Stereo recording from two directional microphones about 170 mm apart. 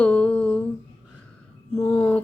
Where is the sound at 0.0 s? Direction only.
10° left (ahead or behind).